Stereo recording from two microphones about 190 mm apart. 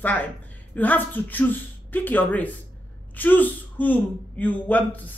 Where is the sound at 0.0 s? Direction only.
10° left (ahead or behind).